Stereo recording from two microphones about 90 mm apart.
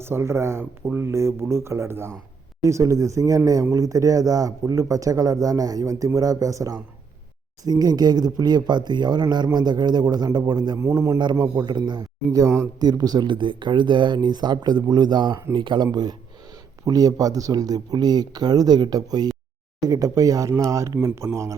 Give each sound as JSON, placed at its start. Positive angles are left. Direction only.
{"t": 0.0, "sound": "speech", "side_deg": -30}
{"t": 10.8, "sound": "speech", "side_deg": -35}
{"t": 11.5, "sound": "speech", "side_deg": -55}
{"t": 12.3, "sound": "speech", "side_deg": -35}
{"t": 12.9, "sound": "speech", "side_deg": -50}
{"t": 15.9, "sound": "speech", "side_deg": -50}